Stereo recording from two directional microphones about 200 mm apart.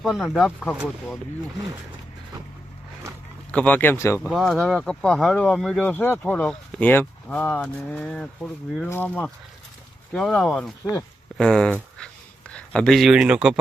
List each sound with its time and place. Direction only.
0.0 s speech: centre (ahead or behind)
3.5 s speech: 5° left (ahead or behind)
4.3 s speech: centre (ahead or behind)